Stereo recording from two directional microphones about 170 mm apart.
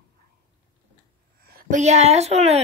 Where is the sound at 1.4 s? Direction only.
60° right (ahead or behind); by 2.6 s 40° right (ahead or behind).